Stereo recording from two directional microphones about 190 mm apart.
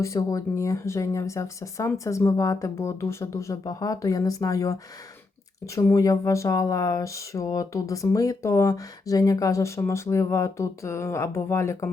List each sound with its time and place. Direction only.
0.0 s speech: 15° left (ahead or behind)